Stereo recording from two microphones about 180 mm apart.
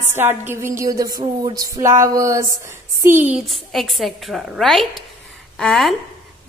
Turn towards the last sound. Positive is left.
turn(degrees=0)  # may be behind; listen again after turning